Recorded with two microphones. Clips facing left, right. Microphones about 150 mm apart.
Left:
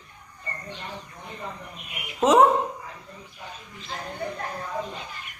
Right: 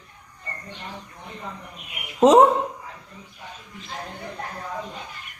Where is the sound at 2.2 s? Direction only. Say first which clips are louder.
Right 5 dB; 35° right (ahead or behind).